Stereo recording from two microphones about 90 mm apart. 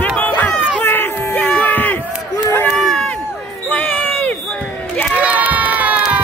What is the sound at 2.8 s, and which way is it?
Run, 5° left (ahead or behind).